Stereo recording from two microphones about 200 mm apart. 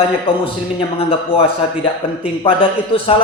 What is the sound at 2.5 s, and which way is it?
Speech, 25° left (ahead or behind).